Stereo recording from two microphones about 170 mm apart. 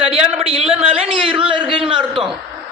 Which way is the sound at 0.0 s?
35° right (ahead or behind).